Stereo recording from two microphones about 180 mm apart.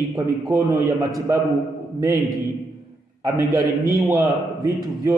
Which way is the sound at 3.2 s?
20° right (ahead or behind).